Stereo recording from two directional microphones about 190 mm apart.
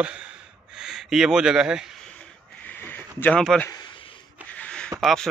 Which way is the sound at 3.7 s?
25° left (ahead or behind).